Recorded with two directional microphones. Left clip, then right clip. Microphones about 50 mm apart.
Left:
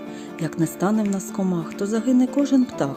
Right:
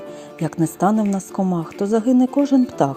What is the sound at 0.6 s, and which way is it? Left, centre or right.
Speech, right.